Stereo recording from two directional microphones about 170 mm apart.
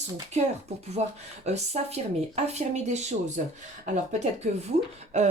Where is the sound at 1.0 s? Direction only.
40° right (ahead or behind).